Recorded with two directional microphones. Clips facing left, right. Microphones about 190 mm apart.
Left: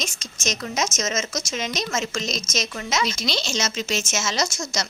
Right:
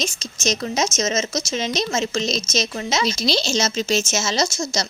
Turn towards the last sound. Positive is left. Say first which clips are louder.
# right 4 dB
turn(degrees=-30)  # may be behind; listen again after turning